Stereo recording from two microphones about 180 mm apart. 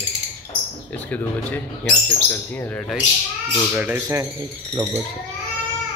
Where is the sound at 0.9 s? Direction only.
10° left (ahead or behind).